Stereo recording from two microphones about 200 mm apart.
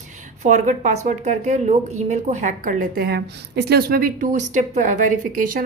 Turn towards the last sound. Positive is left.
turn(degrees=-40)  # may be behind; listen again after turning